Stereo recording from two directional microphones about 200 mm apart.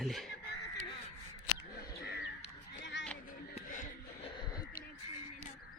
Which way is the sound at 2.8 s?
65° left (ahead or behind).